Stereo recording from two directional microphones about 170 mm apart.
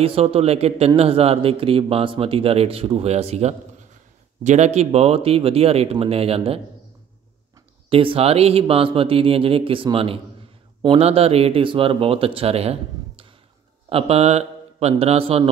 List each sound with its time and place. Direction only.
0.0 s a man's voice: 35° right (ahead or behind)
7.9 s a man's voice: 30° right (ahead or behind)